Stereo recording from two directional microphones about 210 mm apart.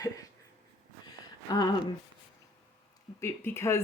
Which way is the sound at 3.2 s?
10° left (ahead or behind).